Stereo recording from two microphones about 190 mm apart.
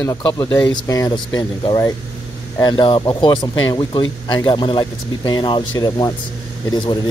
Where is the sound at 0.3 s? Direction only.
15° left (ahead or behind).